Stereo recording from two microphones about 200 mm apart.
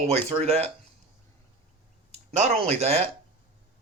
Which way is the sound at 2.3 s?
35° right (ahead or behind).